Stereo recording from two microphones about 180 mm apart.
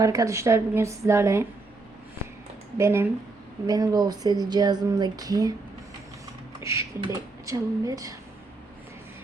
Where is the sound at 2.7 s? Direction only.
15° right (ahead or behind).